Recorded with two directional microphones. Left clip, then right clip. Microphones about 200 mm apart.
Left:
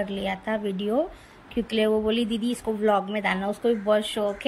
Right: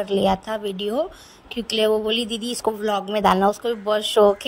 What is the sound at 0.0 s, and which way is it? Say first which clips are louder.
Speech: right 8 dB; 30° right (ahead or behind).